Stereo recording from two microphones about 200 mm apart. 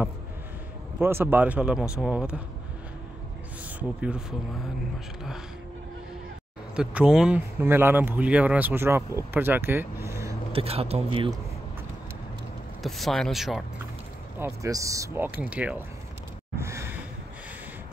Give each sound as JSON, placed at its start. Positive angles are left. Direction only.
{"t": 0.9, "sound": "speech", "side_deg": -10}
{"t": 4.0, "sound": "speech", "side_deg": -5}
{"t": 6.7, "sound": "speech", "side_deg": -5}
{"t": 10.5, "sound": "speech", "side_deg": -30}
{"t": 12.8, "sound": "speech", "side_deg": 0}
{"t": 14.4, "sound": "speech", "side_deg": -15}
{"t": 16.5, "sound": "gasp", "side_deg": -15}